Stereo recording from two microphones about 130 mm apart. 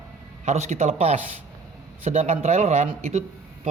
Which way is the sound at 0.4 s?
65° right (ahead or behind).